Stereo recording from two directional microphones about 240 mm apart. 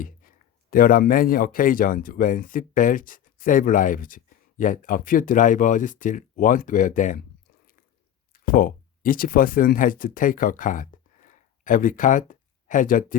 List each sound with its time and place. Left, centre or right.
0.0 s speech: left
8.3 s speech: left